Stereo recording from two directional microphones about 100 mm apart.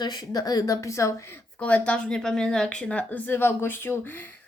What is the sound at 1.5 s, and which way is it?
A woman's voice, 15° left (ahead or behind).